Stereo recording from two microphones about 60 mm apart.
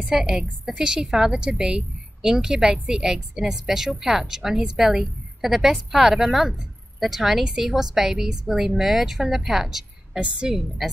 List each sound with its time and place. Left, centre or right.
0.0 s a woman's voice: centre
10.2 s a woman's voice: centre